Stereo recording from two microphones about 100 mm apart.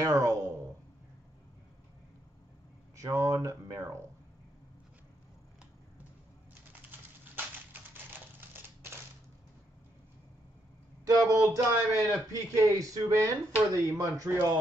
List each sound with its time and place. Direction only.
0.0 s a sound: 35° right (ahead or behind)
3.0 s speech: 30° right (ahead or behind)
11.1 s speech: 35° right (ahead or behind)